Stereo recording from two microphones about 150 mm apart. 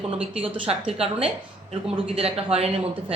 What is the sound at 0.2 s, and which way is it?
A woman's voice, 40° right (ahead or behind).